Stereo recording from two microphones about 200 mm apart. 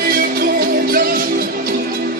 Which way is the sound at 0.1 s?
50° right (ahead or behind).